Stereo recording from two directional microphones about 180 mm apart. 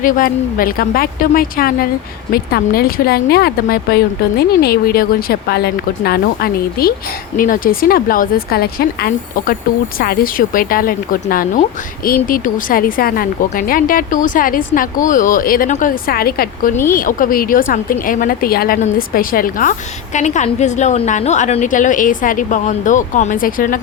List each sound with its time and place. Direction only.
0.0 s speech: 50° left (ahead or behind)